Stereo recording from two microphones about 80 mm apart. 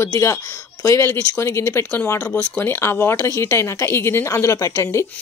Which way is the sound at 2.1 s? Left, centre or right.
Centre.